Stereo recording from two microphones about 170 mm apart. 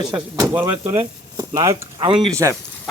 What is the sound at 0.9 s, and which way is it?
Speech, 25° right (ahead or behind).